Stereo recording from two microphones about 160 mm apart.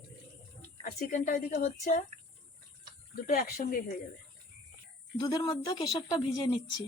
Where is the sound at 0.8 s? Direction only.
60° left (ahead or behind).